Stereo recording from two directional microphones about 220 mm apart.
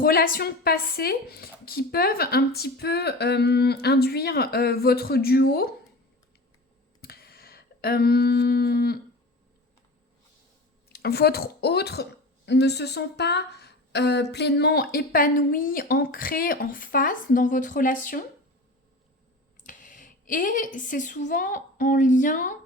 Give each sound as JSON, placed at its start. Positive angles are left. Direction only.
{"t": 0.0, "sound": "a woman's voice", "side_deg": 40}
{"t": 7.0, "sound": "a sound", "side_deg": 45}
{"t": 10.8, "sound": "a woman's voice", "side_deg": 45}
{"t": 19.6, "sound": "speech", "side_deg": 35}